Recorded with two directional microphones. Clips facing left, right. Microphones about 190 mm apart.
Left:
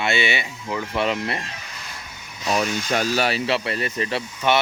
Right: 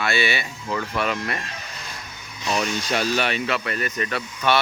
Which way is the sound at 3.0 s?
40° left (ahead or behind).